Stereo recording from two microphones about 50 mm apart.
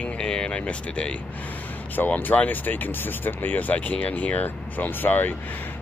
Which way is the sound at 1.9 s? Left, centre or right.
Left.